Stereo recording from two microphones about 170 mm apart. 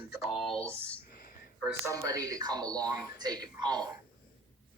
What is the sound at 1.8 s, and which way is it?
Speech, 20° right (ahead or behind).